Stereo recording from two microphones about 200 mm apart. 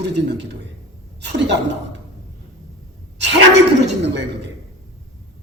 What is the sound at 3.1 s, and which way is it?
Gasp, 60° right (ahead or behind).